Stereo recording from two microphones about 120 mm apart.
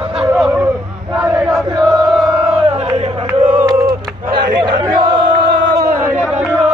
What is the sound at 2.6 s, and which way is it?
Crowd, 60° right (ahead or behind).